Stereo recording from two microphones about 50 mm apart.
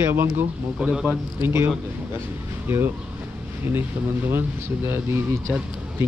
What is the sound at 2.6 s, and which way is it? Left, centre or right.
Speech, right.